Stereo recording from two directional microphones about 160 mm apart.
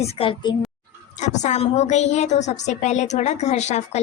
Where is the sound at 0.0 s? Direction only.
35° left (ahead or behind).